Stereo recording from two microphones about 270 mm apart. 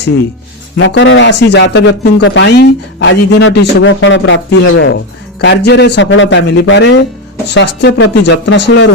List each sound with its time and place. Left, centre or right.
0.8 s speech: left